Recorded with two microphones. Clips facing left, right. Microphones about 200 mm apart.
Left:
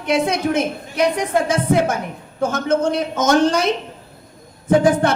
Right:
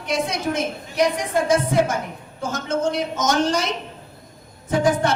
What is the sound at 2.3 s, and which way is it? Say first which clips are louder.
A woman's voice: left 6 dB; 60° left (ahead or behind).